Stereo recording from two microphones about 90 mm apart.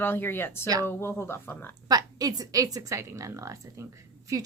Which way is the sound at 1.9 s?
45° right (ahead or behind).